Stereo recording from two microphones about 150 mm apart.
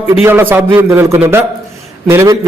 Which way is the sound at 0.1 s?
15° right (ahead or behind).